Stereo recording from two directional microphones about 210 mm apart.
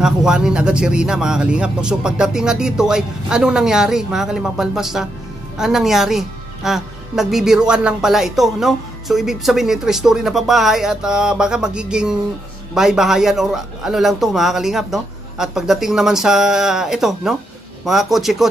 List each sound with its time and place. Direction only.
0.0 s a woman's voice: 5° right (ahead or behind)